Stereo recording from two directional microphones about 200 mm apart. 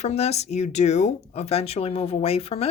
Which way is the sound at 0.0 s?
35° left (ahead or behind).